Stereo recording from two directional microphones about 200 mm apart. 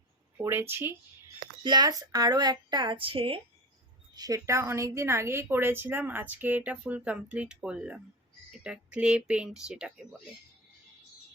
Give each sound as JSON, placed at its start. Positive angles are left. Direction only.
{"t": 0.3, "sound": "a woman's voice", "side_deg": -10}